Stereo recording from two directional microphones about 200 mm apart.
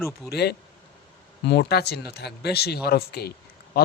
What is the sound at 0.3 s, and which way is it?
Speech, 55° left (ahead or behind).